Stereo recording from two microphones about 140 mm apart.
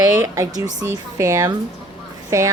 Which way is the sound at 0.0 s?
25° right (ahead or behind).